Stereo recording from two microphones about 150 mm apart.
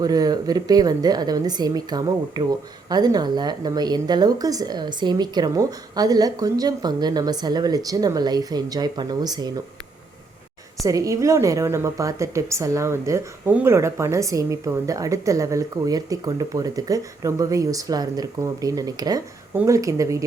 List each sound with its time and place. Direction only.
0.0 s a woman's voice: 25° right (ahead or behind)
10.8 s a woman's voice: 20° right (ahead or behind)